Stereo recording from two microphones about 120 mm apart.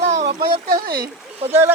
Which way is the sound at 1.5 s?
20° right (ahead or behind).